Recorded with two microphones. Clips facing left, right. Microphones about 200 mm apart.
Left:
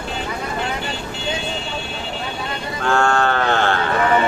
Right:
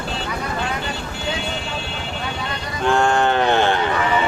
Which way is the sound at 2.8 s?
20° right (ahead or behind).